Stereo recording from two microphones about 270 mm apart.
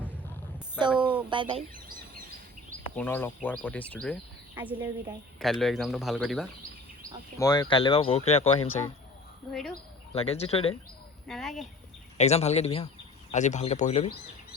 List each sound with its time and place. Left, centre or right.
0.9 s speech: centre
1.3 s speech: centre
2.9 s speech: centre
4.5 s speech: centre
7.3 s speech: centre
9.5 s speech: centre
10.2 s speech: left
11.3 s speech: centre
12.1 s speech: left